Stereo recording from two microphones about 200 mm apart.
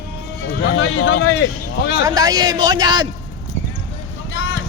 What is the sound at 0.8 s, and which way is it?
Speech, 80° left.